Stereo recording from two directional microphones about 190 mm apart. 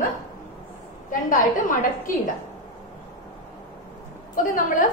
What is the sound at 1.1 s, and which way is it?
A woman's voice, 45° left (ahead or behind).